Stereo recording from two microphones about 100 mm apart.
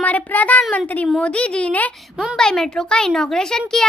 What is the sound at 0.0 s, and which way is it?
A child's voice, 15° left (ahead or behind).